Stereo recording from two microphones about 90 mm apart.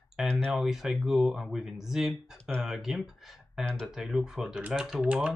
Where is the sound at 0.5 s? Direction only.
5° right (ahead or behind).